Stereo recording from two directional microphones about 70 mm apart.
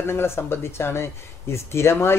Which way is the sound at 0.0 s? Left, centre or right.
Left.